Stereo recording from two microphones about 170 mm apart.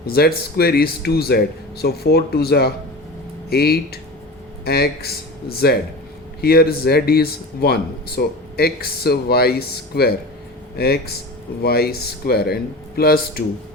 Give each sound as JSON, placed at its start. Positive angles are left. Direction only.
{"t": 0.0, "sound": "speech", "side_deg": 65}